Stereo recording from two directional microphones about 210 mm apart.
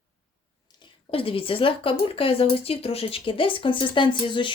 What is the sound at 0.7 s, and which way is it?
Speech, 25° left (ahead or behind).